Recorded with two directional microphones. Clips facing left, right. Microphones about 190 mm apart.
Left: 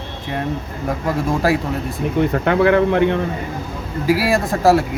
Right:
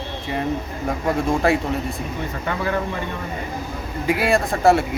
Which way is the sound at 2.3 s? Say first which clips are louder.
Left 9 dB; 65° left (ahead or behind).